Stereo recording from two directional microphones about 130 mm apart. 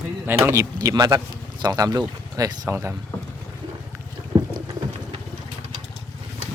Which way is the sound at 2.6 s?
20° right (ahead or behind).